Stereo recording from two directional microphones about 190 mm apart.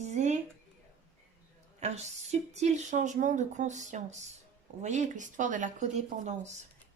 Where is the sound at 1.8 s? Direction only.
35° right (ahead or behind).